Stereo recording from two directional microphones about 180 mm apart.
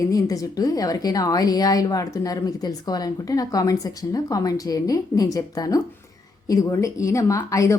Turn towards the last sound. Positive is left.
turn(degrees=15)  # may be behind; listen again after turning